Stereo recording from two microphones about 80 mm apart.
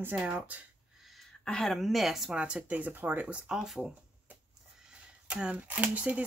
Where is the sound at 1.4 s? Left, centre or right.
Centre.